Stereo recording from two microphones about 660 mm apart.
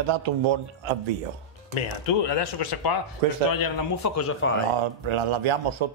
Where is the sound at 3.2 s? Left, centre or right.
Right.